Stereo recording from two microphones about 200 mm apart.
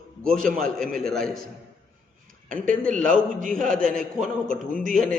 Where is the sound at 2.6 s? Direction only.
40° right (ahead or behind).